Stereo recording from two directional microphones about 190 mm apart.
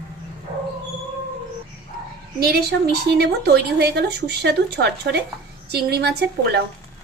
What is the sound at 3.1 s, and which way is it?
Speech, 60° right (ahead or behind).